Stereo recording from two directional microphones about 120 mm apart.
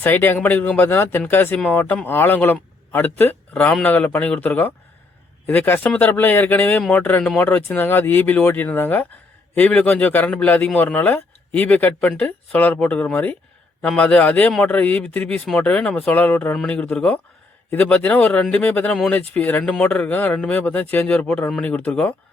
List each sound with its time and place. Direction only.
0.0 s speech: 15° left (ahead or behind)